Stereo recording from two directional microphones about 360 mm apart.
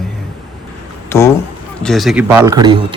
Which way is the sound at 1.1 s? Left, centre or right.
Centre.